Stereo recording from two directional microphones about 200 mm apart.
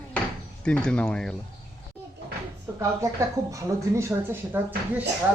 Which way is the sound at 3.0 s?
15° right (ahead or behind).